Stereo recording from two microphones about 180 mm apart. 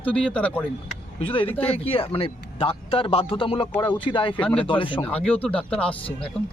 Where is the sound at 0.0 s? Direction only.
5° left (ahead or behind).